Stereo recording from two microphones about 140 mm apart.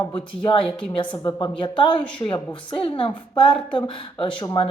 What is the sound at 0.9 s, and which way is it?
A woman's voice, 30° left (ahead or behind).